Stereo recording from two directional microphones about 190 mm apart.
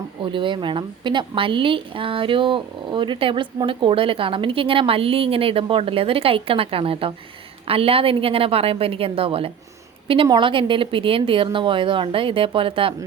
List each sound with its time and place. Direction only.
0.2 s a woman's voice: 25° right (ahead or behind)